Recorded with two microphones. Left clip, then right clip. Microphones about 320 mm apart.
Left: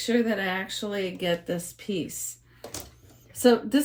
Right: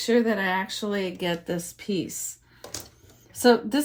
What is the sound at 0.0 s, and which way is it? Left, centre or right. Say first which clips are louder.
Speech: right 3 dB; right.